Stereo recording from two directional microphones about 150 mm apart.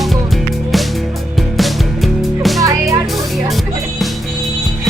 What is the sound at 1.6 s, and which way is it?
Music, centre (ahead or behind).